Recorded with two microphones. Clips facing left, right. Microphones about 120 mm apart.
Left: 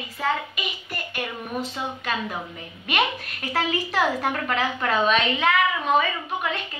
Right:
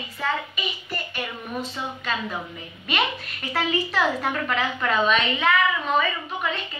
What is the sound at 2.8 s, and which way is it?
A child's voice, 50° left (ahead or behind).